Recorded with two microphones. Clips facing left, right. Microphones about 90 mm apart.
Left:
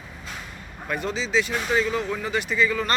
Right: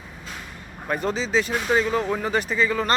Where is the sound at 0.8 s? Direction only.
35° right (ahead or behind).